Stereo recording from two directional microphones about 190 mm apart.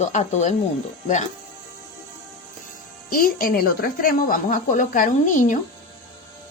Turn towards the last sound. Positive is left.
turn(degrees=40)  # may be behind; listen again after turning